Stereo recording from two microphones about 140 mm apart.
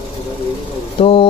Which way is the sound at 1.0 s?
40° left (ahead or behind).